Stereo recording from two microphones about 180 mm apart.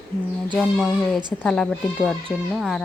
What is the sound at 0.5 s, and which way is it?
Speech, centre (ahead or behind).